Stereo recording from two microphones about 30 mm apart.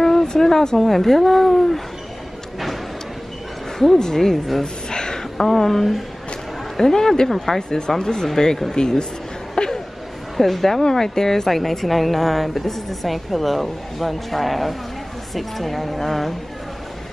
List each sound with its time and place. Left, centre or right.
0.0 s a sound: centre
0.3 s speech: centre
0.8 s a woman's voice: centre
3.7 s speech: centre
4.0 s speech: centre
4.8 s a sound: left
5.6 s speech: centre
8.0 s speech: left
9.6 s a sound: left
10.3 s a woman's voice: centre
10.8 s a woman's voice: centre